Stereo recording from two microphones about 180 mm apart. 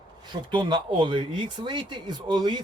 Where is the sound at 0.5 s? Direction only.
25° right (ahead or behind).